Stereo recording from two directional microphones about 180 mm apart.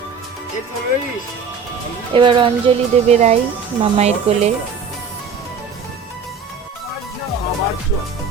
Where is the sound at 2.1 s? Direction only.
30° right (ahead or behind).